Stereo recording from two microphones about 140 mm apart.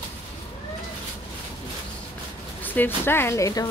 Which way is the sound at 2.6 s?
15° left (ahead or behind).